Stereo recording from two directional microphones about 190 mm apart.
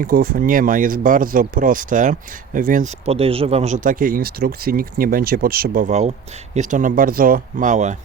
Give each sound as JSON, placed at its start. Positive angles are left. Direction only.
{"t": 0.0, "sound": "speech", "side_deg": -50}